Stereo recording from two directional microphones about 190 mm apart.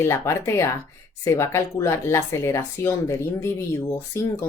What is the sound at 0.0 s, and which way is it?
Speech, 15° left (ahead or behind).